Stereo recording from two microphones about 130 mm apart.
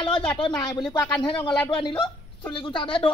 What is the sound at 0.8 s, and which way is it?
Speech, 40° left (ahead or behind).